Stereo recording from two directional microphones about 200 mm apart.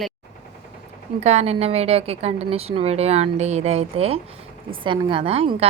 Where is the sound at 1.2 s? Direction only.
35° right (ahead or behind).